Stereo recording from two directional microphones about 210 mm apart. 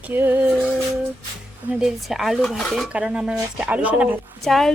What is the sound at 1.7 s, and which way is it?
Speech, centre (ahead or behind).